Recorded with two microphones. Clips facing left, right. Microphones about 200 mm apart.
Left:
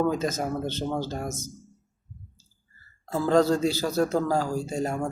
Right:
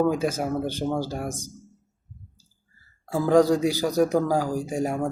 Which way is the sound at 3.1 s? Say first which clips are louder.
Right 3 dB; 15° right (ahead or behind).